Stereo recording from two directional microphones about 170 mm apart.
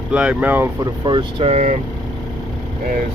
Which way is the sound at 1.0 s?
30° right (ahead or behind).